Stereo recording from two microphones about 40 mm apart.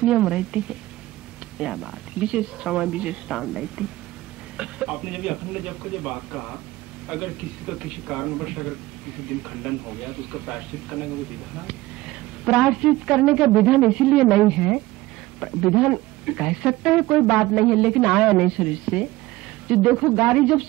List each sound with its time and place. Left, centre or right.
0.0 s a man's voice: centre
1.6 s a man's voice: centre
2.1 s speech: right
5.9 s a man's voice: centre
7.1 s a man's voice: right
8.3 s a man's voice: centre
9.9 s a woman's voice: right
14.5 s a man's voice: centre
16.9 s speech: centre
17.7 s a man's voice: centre
18.5 s a man's voice: right